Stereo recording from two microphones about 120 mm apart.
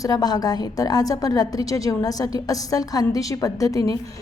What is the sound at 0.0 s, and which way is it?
A woman's voice, 30° left (ahead or behind).